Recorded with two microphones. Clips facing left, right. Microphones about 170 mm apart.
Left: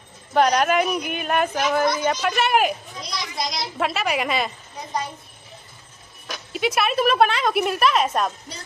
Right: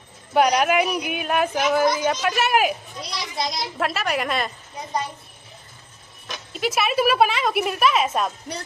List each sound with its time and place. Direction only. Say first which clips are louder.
0.3 s speech: even; 10° right (ahead or behind)
6.5 s speech: left 1 dB; centre (ahead or behind)